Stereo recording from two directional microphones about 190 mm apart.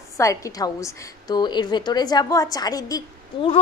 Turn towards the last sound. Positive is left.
turn(degrees=20)  # may be behind; listen again after turning